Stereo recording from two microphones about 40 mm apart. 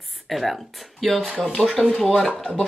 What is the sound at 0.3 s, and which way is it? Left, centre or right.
Speech, centre.